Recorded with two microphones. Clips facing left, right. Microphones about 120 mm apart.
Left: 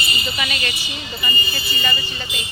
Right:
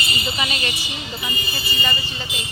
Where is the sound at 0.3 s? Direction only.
25° right (ahead or behind).